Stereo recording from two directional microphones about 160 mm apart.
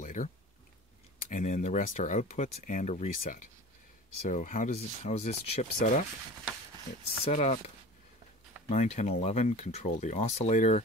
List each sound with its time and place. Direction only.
0.0 s a sound: 55° left (ahead or behind)
1.3 s speech: 50° left (ahead or behind)
7.2 s speech: 45° left (ahead or behind)